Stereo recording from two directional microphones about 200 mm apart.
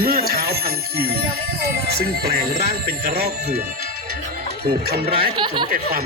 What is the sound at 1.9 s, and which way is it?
Speech, 50° right (ahead or behind).